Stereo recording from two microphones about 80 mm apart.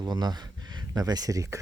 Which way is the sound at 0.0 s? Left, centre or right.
Right.